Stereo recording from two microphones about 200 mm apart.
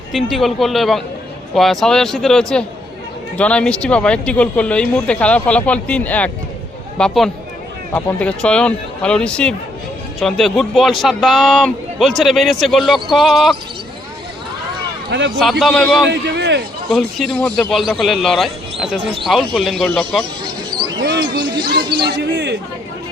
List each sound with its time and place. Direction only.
0.1 s speech: centre (ahead or behind)
15.4 s speech: centre (ahead or behind)
16.0 s a man's voice: 55° right (ahead or behind)
16.9 s speech: 5° left (ahead or behind)
20.7 s a sound: 20° right (ahead or behind)
21.0 s speech: 55° right (ahead or behind)
21.5 s speech: 20° right (ahead or behind)
22.0 s a man's voice: 60° right (ahead or behind)